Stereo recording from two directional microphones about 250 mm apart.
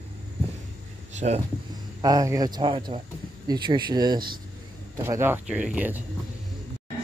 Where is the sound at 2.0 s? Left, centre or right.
Centre.